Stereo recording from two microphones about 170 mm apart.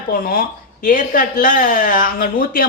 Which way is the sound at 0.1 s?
60° left (ahead or behind).